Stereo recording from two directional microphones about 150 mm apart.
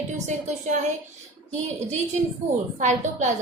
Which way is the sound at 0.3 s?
50° right (ahead or behind).